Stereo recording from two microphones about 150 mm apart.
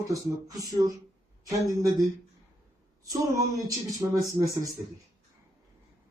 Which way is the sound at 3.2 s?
25° right (ahead or behind).